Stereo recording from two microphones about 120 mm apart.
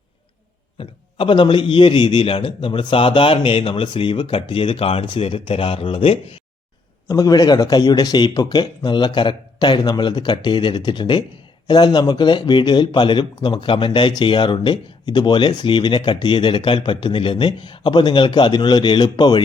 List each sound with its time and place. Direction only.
0.8 s a man's voice: 45° left (ahead or behind)
7.1 s speech: 30° left (ahead or behind)